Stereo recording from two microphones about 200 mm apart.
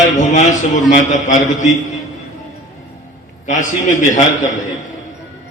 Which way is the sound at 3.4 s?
40° left (ahead or behind).